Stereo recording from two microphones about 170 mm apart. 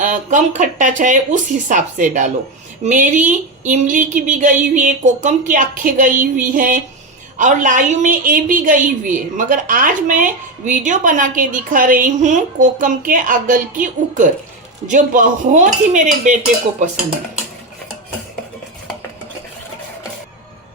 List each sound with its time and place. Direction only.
0.0 s a woman's voice: 50° right (ahead or behind)